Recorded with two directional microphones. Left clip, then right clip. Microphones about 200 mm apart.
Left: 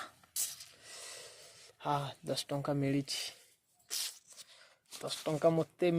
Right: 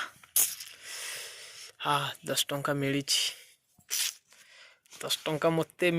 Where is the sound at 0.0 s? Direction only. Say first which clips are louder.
Right 9 dB; 5° left (ahead or behind).